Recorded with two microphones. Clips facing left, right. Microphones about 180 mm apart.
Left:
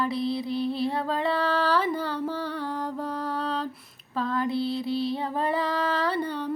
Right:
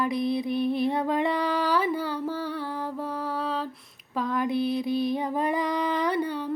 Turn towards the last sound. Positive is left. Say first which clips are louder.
# right 1 dB
turn(degrees=-15)  # may be behind; listen again after turning